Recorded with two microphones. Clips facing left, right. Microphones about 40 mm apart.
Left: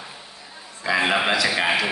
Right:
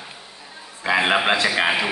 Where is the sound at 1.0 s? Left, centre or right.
Centre.